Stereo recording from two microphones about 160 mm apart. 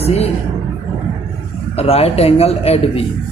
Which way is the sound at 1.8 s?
40° left (ahead or behind).